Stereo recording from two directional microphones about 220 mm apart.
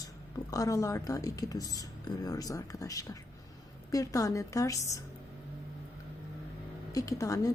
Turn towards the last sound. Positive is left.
turn(degrees=15)  # may be behind; listen again after turning